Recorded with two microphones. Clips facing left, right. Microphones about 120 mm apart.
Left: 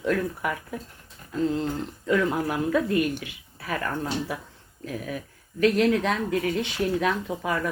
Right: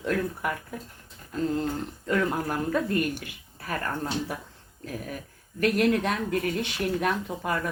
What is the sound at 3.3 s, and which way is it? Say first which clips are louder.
Speech: left 2 dB; 45° right (ahead or behind).